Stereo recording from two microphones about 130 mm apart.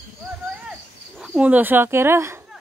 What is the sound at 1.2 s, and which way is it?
Speech, 10° right (ahead or behind).